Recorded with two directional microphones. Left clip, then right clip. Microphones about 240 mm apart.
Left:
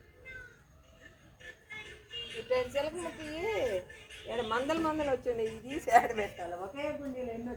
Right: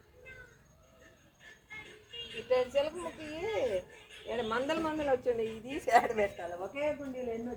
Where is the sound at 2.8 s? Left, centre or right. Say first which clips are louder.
Right 2 dB; centre.